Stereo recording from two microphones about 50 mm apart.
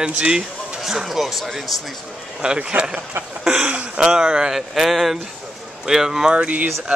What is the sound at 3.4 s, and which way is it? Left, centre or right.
Speech, centre.